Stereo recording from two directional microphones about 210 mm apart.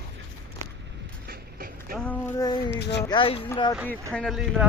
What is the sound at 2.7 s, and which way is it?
Speech, 55° left (ahead or behind).